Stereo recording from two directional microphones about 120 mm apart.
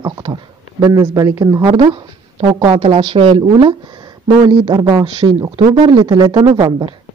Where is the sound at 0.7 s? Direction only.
25° right (ahead or behind).